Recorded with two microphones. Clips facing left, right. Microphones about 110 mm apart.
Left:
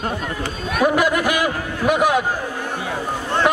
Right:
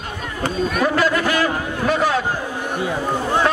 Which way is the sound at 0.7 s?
10° left (ahead or behind).